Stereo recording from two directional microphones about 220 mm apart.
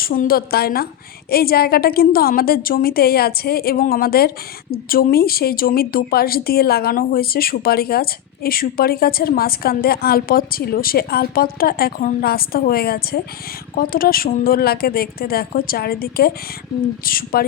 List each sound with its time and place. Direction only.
0.0 s a woman's voice: 40° left (ahead or behind)